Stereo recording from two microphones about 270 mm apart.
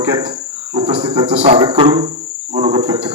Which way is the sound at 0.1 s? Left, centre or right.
Centre.